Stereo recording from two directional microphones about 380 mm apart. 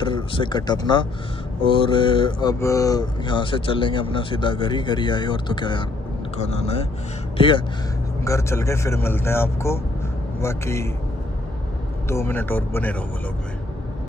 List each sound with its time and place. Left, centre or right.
0.0 s speech: centre
12.1 s speech: centre